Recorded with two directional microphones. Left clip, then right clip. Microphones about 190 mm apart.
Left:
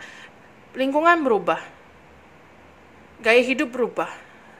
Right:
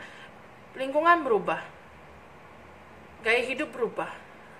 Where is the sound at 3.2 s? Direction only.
50° left (ahead or behind).